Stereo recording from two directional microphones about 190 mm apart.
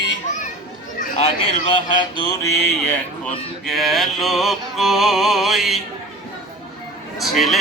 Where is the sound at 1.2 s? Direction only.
30° left (ahead or behind).